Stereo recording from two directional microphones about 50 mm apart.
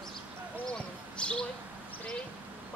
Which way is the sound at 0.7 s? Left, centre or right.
Centre.